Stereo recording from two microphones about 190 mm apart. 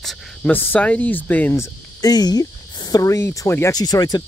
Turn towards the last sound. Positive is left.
turn(degrees=20)  # may be behind; listen again after turning